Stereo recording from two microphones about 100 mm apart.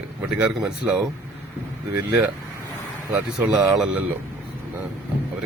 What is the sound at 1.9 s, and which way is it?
Speech, 20° right (ahead or behind).